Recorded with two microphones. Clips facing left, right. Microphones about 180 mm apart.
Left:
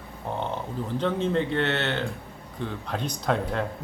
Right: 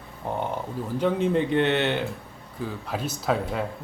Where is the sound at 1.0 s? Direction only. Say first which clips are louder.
Right 3 dB; 10° right (ahead or behind).